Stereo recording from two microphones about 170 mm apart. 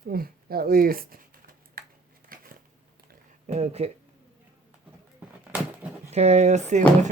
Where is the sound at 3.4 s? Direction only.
40° right (ahead or behind).